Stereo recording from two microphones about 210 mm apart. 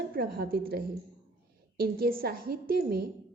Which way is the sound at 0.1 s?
45° right (ahead or behind).